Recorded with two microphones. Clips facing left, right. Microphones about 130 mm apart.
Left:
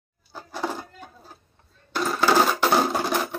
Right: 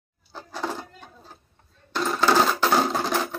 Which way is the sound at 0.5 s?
15° left (ahead or behind).